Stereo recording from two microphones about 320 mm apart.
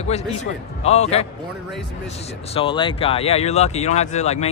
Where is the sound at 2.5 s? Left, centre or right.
Centre.